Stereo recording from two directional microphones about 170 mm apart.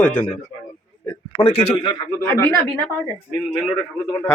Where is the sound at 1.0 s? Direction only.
30° left (ahead or behind).